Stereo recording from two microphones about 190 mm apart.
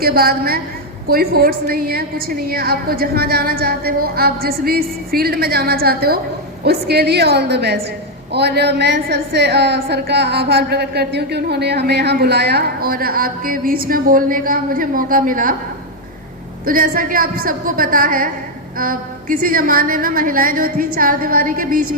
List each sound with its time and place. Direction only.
0.0 s a woman's voice: 50° right (ahead or behind)
16.6 s a woman's voice: 50° right (ahead or behind)